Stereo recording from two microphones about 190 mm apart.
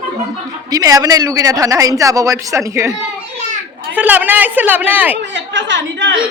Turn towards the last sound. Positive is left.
turn(degrees=-70)  # may be behind; listen again after turning